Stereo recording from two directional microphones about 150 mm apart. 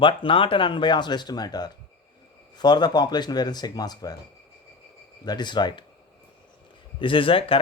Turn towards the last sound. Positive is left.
turn(degrees=35)  # may be behind; listen again after turning